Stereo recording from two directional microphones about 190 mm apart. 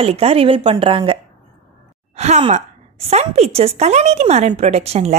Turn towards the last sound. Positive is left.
turn(degrees=-35)  # may be behind; listen again after turning